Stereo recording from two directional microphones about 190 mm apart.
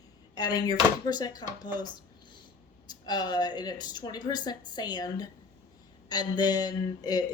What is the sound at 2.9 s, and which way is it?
Speech, 20° left (ahead or behind).